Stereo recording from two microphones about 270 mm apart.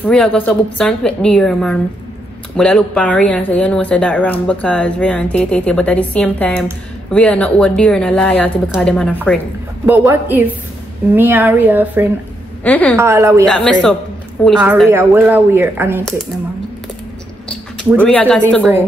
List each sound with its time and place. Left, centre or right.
0.0 s speech: centre
9.8 s speech: centre
12.6 s speech: centre
12.9 s speech: centre
13.5 s speech: centre
17.9 s speech: centre